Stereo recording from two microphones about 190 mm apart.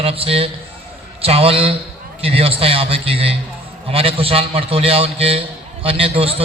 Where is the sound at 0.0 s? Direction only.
30° right (ahead or behind).